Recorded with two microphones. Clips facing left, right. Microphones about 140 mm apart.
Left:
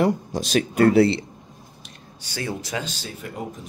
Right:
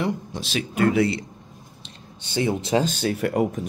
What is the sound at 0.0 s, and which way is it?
Speech, 40° left (ahead or behind).